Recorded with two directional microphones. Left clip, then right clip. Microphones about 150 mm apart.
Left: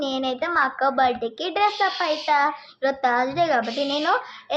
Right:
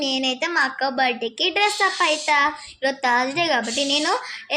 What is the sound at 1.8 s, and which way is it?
Child singing, 20° right (ahead or behind).